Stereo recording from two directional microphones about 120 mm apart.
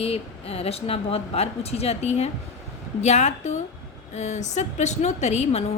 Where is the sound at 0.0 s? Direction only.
55° left (ahead or behind).